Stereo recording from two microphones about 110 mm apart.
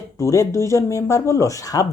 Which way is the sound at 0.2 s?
30° left (ahead or behind).